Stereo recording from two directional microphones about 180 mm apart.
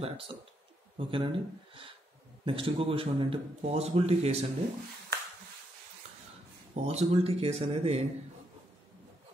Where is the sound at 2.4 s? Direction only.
30° right (ahead or behind).